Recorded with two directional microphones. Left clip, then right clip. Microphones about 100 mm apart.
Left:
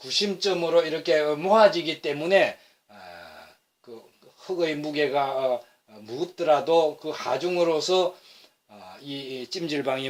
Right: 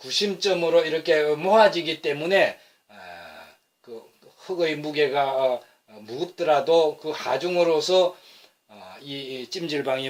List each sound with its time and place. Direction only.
0.0 s speech: 30° left (ahead or behind)
4.4 s speech: 35° left (ahead or behind)
9.0 s speech: 35° left (ahead or behind)